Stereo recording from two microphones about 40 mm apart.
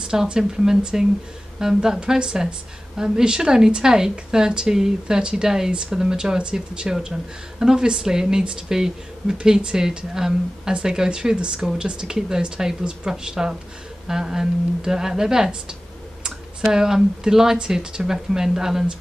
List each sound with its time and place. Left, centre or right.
0.1 s speech: centre
16.7 s speech: centre